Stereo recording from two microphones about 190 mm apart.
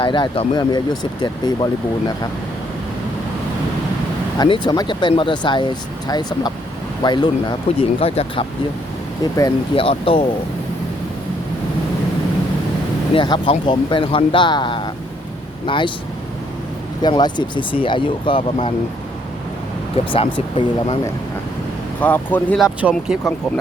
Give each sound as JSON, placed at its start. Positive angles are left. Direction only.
{"t": 0.0, "sound": "speech", "side_deg": 25}
{"t": 4.4, "sound": "speech", "side_deg": 25}
{"t": 9.3, "sound": "speech", "side_deg": 20}
{"t": 9.8, "sound": "speech", "side_deg": 30}
{"t": 13.1, "sound": "speech", "side_deg": 25}
{"t": 17.0, "sound": "speech", "side_deg": 20}
{"t": 20.0, "sound": "speech", "side_deg": 30}
{"t": 22.0, "sound": "speech", "side_deg": 10}